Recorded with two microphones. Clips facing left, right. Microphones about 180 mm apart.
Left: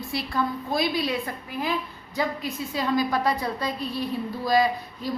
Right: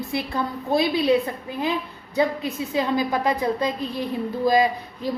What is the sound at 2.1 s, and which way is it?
A woman's voice, 20° right (ahead or behind).